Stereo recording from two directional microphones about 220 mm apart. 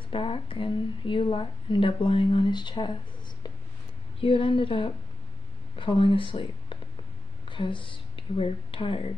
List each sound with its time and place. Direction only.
0.1 s speech: 25° left (ahead or behind)
4.2 s speech: 25° left (ahead or behind)